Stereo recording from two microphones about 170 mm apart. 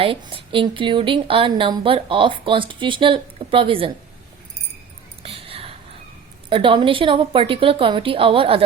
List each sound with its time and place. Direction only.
0.0 s speech: 30° right (ahead or behind)
5.2 s a sound: 35° right (ahead or behind)
6.5 s a woman's voice: 30° right (ahead or behind)